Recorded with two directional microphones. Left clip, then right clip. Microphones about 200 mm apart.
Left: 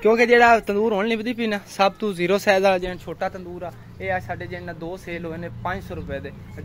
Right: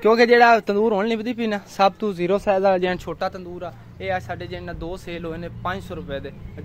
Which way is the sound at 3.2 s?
5° right (ahead or behind).